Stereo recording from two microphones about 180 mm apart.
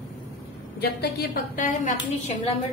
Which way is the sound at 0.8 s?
60° left (ahead or behind).